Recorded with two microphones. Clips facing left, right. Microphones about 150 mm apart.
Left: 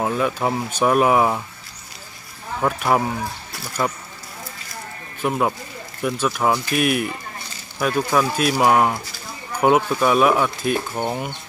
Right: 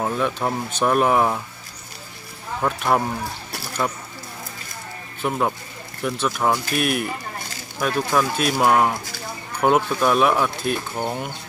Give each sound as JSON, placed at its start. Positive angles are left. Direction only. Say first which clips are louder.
{"t": 0.0, "sound": "speech", "louder": "left 2 dB", "side_deg": 5}
{"t": 2.6, "sound": "speech", "louder": "left 1 dB", "side_deg": 5}
{"t": 5.2, "sound": "speech", "louder": "left 2 dB", "side_deg": 5}